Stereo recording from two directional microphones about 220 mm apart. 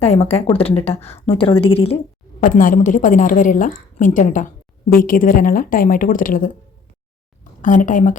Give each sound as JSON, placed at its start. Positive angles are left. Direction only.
{"t": 0.0, "sound": "a woman's voice", "side_deg": 30}
{"t": 2.4, "sound": "a woman's voice", "side_deg": 35}
{"t": 7.6, "sound": "a woman's voice", "side_deg": 35}